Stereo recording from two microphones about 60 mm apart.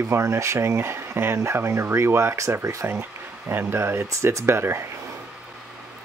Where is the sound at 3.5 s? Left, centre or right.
Right.